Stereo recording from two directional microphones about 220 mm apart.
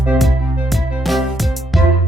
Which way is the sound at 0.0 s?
Centre (ahead or behind).